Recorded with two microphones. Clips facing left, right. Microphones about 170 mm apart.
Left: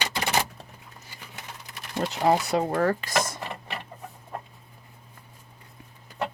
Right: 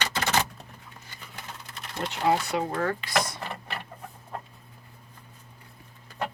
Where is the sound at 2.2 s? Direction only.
40° left (ahead or behind).